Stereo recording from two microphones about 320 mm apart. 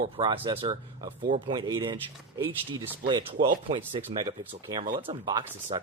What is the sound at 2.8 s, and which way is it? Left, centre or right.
Speech, centre.